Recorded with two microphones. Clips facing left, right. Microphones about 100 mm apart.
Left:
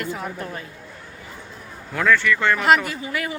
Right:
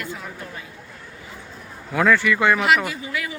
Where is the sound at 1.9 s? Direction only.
5° right (ahead or behind).